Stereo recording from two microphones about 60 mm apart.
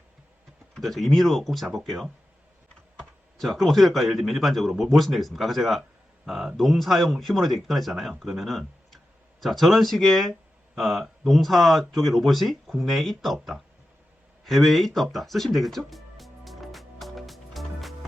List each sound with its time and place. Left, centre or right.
0.7 s speech: centre
15.4 s music: centre